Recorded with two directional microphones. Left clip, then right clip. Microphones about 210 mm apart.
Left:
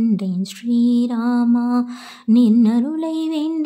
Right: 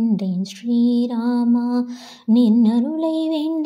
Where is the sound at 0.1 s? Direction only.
Centre (ahead or behind).